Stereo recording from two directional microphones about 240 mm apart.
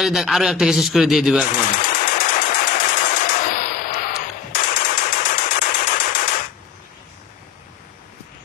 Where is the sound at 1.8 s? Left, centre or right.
Left.